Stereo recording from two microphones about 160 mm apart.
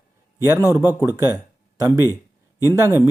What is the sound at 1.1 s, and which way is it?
Speech, 20° right (ahead or behind).